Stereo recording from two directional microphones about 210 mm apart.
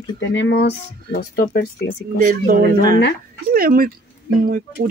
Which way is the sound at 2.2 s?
40° right (ahead or behind).